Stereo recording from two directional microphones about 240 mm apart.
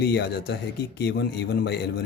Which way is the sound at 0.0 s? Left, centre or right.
Left.